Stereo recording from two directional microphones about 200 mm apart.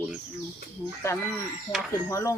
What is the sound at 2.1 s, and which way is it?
Speech, 15° left (ahead or behind).